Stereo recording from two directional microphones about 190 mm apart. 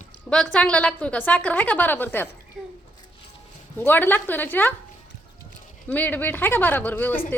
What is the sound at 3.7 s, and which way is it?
A woman's voice, 10° left (ahead or behind).